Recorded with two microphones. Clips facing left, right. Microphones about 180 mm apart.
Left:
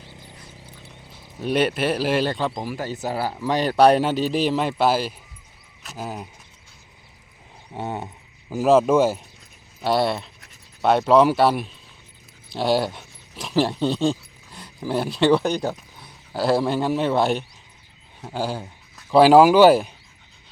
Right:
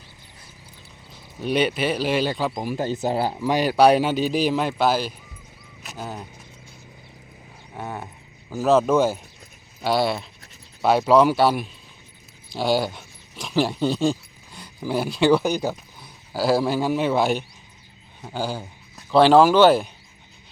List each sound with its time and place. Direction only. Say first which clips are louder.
1.4 s speech: left 1 dB; centre (ahead or behind)
2.6 s speech: right 4 dB; 25° right (ahead or behind)
3.3 s speech: left 3 dB; 10° right (ahead or behind); by 6.2 s 5° left (ahead or behind)
7.8 s speech: left 3 dB; 20° left (ahead or behind)
8.4 s speech: left 2 dB; 10° left (ahead or behind)